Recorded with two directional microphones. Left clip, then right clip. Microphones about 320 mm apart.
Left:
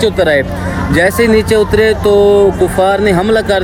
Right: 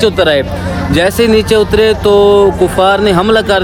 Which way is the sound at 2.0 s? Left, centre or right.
Centre.